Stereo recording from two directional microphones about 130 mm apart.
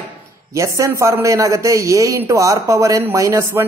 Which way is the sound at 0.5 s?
25° right (ahead or behind).